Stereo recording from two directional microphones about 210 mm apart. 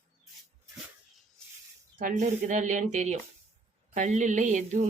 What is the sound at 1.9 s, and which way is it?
Speech, 35° right (ahead or behind).